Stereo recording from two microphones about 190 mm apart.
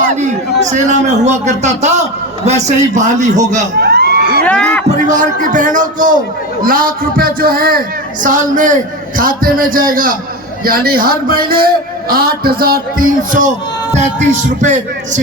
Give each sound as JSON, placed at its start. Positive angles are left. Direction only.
{"t": 0.7, "sound": "a man's voice", "side_deg": -40}
{"t": 3.8, "sound": "a sound", "side_deg": -60}
{"t": 4.4, "sound": "speech", "side_deg": 5}
{"t": 4.9, "sound": "a man's voice", "side_deg": -40}